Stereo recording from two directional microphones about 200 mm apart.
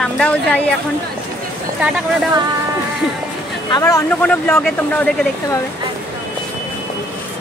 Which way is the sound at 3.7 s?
20° left (ahead or behind).